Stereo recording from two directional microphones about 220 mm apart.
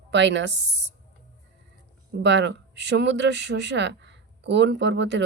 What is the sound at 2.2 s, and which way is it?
Speech, 55° right (ahead or behind).